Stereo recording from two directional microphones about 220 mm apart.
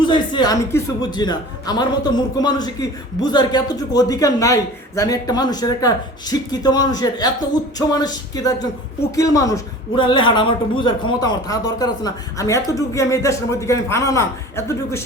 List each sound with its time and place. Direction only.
0.0 s speech: 20° left (ahead or behind)